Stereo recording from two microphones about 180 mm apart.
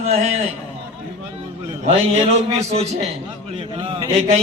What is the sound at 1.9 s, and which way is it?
A man's voice, 35° right (ahead or behind).